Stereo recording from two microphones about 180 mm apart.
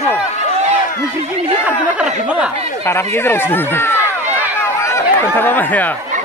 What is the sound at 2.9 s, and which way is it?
Speech, 15° left (ahead or behind).